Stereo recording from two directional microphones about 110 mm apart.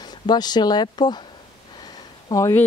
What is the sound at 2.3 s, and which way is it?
Speech, 30° left (ahead or behind).